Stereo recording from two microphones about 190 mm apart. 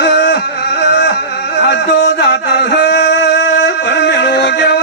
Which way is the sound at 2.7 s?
55° left (ahead or behind).